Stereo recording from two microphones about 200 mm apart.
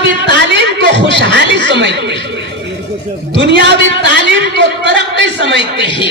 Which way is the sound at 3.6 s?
60° right (ahead or behind).